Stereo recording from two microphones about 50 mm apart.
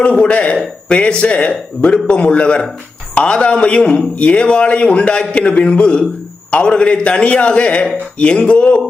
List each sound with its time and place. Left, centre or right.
0.0 s speech: left